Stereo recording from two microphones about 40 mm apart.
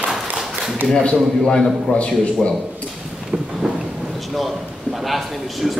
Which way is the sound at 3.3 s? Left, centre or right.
Centre.